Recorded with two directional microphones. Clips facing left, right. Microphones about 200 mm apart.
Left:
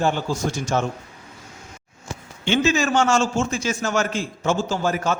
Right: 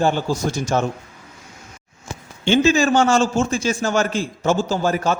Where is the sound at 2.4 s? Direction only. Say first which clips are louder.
Right 4 dB; 30° right (ahead or behind).